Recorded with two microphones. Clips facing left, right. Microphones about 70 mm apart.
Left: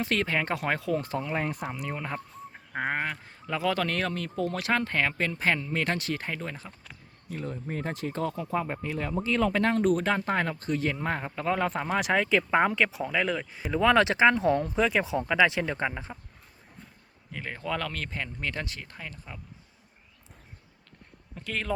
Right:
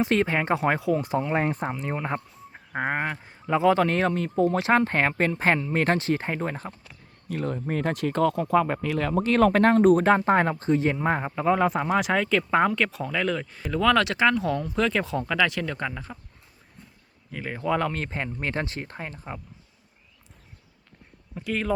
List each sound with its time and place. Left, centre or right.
0.0 s speech: right
1.3 s speech: right
2.7 s speech: centre; by 6.7 s right
7.3 s speech: right; by 13.7 s centre
13.7 s speech: left
14.8 s speech: centre
17.3 s speech: centre
17.6 s speech: right
21.3 s speech: centre